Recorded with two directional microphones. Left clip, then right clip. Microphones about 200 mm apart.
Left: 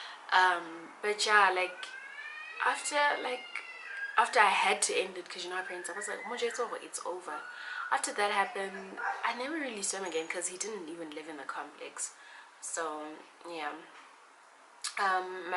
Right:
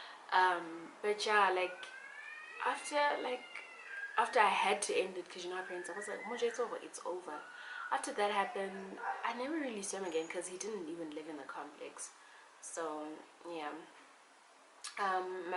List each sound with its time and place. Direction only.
0.3 s speech: 5° right (ahead or behind)
6.5 s speech: 20° right (ahead or behind)
7.9 s speech: 10° right (ahead or behind)
12.7 s speech: 20° right (ahead or behind)
14.8 s a sound: 5° right (ahead or behind)